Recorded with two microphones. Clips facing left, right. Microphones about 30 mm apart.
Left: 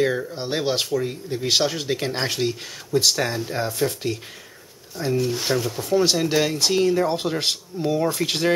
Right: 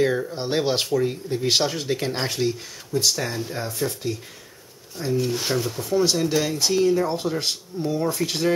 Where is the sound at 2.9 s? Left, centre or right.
Left.